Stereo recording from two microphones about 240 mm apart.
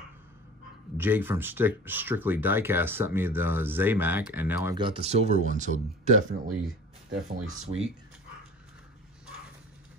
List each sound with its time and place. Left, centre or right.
0.9 s speech: centre
4.7 s speech: right